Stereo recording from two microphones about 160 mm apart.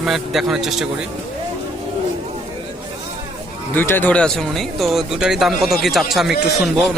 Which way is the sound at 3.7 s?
10° left (ahead or behind).